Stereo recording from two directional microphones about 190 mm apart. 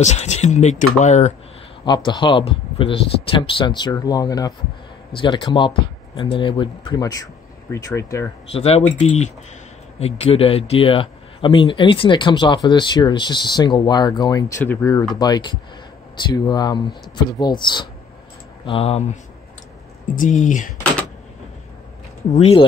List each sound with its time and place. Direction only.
0.0 s speech: 35° left (ahead or behind)
1.9 s a man's voice: 25° left (ahead or behind)
8.5 s a man's voice: 30° left (ahead or behind)
20.2 s speech: 40° left (ahead or behind)
22.3 s speech: 30° left (ahead or behind)